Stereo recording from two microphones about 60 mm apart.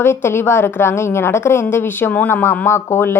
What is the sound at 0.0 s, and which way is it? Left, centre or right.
Speech, left.